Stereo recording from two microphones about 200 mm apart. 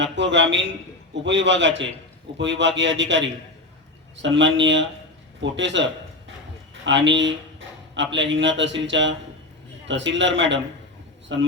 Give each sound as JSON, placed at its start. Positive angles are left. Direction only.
{"t": 0.0, "sound": "a man's voice", "side_deg": -65}